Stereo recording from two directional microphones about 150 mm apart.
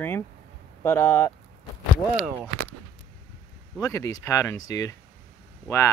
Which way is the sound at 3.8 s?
20° left (ahead or behind).